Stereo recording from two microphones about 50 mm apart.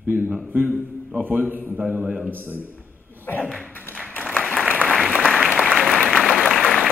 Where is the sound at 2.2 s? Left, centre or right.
Right.